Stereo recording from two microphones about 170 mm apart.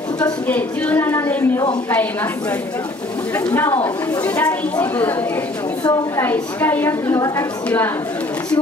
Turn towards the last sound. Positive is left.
turn(degrees=10)  # may be behind; listen again after turning